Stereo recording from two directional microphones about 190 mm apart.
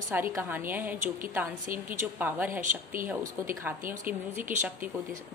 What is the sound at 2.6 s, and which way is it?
Speech, 45° right (ahead or behind).